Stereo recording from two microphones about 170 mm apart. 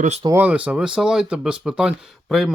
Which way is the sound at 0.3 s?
10° right (ahead or behind).